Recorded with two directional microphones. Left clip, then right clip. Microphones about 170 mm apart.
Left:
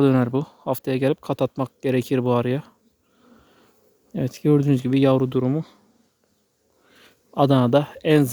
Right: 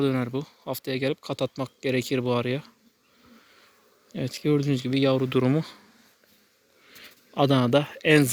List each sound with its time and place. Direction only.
0.0 s speech: 55° left (ahead or behind)
4.1 s speech: 45° left (ahead or behind)
5.3 s speech: 20° left (ahead or behind)
7.3 s speech: 35° left (ahead or behind)